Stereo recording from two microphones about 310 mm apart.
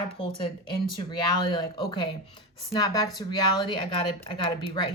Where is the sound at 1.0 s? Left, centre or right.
Centre.